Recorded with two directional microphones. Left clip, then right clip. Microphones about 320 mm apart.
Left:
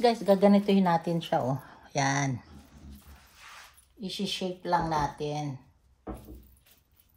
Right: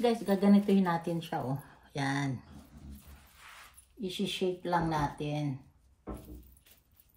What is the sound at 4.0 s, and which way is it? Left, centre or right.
A woman's voice, centre.